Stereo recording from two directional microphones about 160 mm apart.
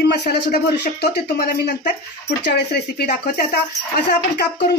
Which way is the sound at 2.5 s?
90° left.